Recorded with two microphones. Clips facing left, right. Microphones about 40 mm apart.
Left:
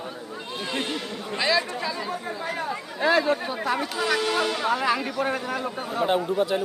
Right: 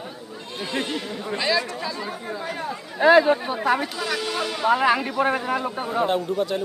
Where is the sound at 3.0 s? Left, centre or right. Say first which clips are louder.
Right 6 dB; right.